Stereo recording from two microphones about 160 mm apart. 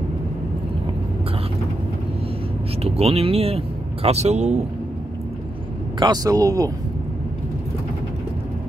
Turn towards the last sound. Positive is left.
turn(degrees=-20)  # may be behind; listen again after turning